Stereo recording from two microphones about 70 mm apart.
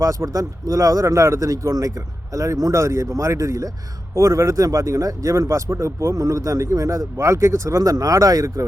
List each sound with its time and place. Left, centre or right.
0.0 s speech: right
7.8 s speech: right